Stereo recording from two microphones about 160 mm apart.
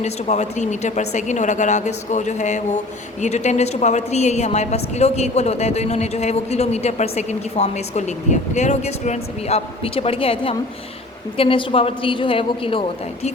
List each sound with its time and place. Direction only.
0.0 s a woman's voice: 45° left (ahead or behind)